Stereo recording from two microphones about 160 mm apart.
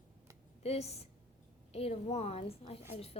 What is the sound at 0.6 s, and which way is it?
A woman's voice, 40° left (ahead or behind).